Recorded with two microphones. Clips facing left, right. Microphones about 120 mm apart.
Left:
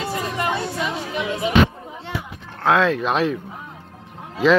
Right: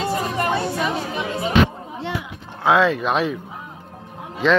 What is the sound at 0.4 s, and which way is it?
Music, 45° right (ahead or behind).